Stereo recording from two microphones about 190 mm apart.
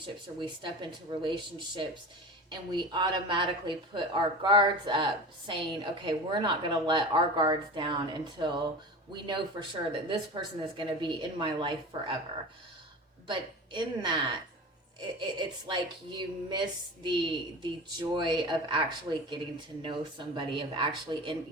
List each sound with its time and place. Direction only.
0.0 s speech: 25° right (ahead or behind)
13.2 s speech: 25° right (ahead or behind)
15.4 s speech: 25° right (ahead or behind)
19.8 s speech: 25° right (ahead or behind)